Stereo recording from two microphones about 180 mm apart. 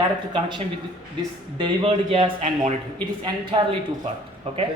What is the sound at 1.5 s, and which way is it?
Speech, 30° right (ahead or behind).